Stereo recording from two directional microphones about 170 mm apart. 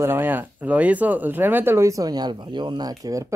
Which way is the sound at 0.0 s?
15° right (ahead or behind).